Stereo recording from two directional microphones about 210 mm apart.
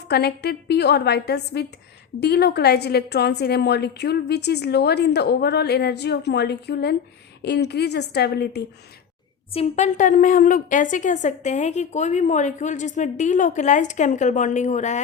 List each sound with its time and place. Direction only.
0.1 s a woman's voice: 50° left (ahead or behind)
9.5 s a woman's voice: 30° left (ahead or behind)